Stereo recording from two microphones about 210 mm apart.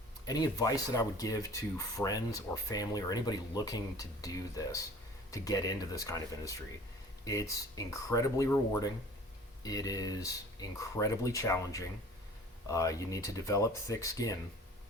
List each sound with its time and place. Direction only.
0.3 s speech: 20° left (ahead or behind)